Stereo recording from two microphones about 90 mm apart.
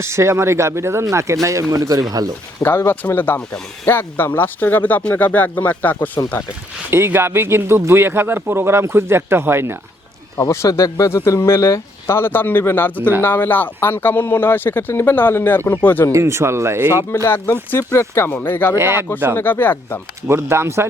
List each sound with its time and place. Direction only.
0.0 s speech: 30° right (ahead or behind)
2.6 s speech: 25° left (ahead or behind)
6.9 s speech: 25° right (ahead or behind)
10.4 s speech: 30° left (ahead or behind)
10.7 s speech: 45° left (ahead or behind)
11.3 s speech: 30° left (ahead or behind)
16.1 s speech: 30° right (ahead or behind)
17.2 s speech: 25° left (ahead or behind)
18.8 s speech: 30° right (ahead or behind)
19.4 s speech: 20° left (ahead or behind)
20.2 s speech: 30° right (ahead or behind)